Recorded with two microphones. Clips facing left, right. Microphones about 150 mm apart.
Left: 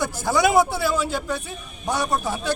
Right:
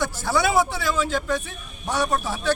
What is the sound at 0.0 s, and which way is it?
Speech, 10° left (ahead or behind).